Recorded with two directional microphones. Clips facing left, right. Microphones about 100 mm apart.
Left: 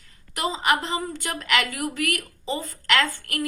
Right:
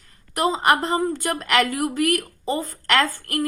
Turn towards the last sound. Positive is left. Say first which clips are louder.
# right 3 dB
turn(degrees=-40)  # may be behind; listen again after turning